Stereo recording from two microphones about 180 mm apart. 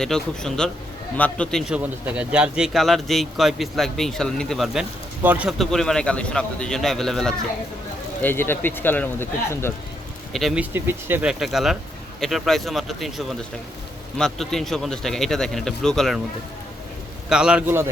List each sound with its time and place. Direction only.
0.0 s speech: 5° left (ahead or behind)
10.3 s speech: centre (ahead or behind)
17.2 s speech: 5° right (ahead or behind)